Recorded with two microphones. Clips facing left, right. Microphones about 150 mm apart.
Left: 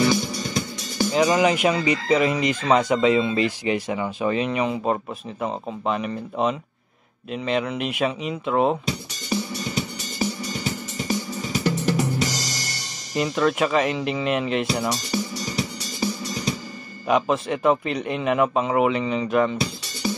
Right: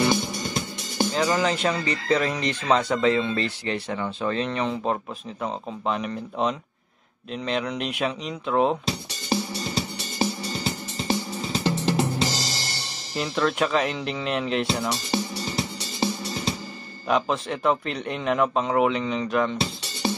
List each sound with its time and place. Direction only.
1.1 s a man's voice: 15° left (ahead or behind)
9.3 s music: 30° right (ahead or behind)
13.1 s a man's voice: centre (ahead or behind)
14.9 s music: 30° right (ahead or behind)
17.1 s a man's voice: 5° left (ahead or behind)